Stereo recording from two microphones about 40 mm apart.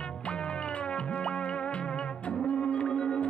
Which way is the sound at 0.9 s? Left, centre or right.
Left.